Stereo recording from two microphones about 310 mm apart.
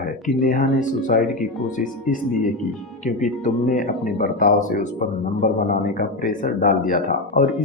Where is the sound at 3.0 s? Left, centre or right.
Left.